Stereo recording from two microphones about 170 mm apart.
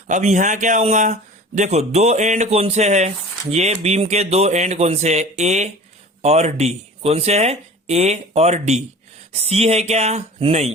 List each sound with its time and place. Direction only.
0.1 s speech: 45° right (ahead or behind)